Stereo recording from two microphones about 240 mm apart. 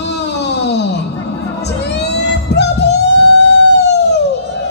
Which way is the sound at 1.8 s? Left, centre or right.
Left.